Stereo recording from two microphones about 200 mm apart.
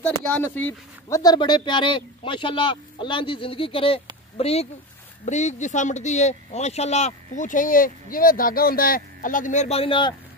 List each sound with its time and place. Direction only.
0.0 s speech: 10° left (ahead or behind); by 10.1 s 25° left (ahead or behind)